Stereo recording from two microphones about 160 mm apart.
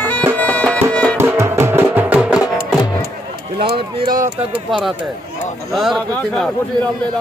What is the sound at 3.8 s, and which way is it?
Speech, 35° right (ahead or behind).